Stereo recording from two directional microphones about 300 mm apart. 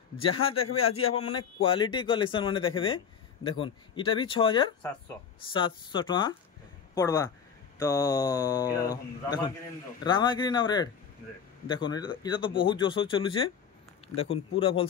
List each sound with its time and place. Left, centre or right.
0.2 s speech: centre